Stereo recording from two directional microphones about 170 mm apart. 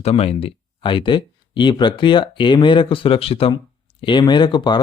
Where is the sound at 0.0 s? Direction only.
35° left (ahead or behind).